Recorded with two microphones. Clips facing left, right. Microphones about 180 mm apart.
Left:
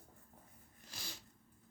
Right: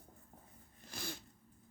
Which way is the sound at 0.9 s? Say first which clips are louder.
Right 8 dB; 55° right (ahead or behind).